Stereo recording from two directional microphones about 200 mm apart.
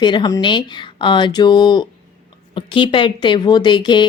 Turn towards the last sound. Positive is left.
turn(degrees=20)  # may be behind; listen again after turning